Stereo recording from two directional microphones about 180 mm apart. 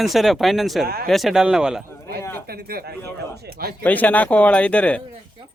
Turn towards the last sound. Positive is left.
turn(degrees=5)  # may be behind; listen again after turning